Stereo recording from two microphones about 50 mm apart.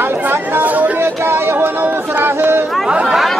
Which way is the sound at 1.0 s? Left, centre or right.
Right.